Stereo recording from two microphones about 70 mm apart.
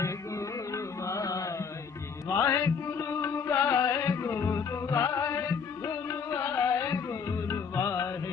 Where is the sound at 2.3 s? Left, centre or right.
Left.